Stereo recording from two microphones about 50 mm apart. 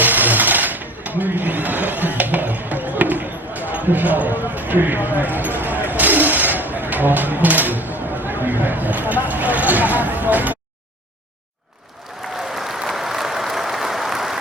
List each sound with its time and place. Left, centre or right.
0.0 s blender: right
12.4 s applause: centre